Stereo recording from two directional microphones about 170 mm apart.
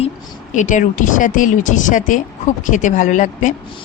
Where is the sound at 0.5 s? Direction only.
45° left (ahead or behind).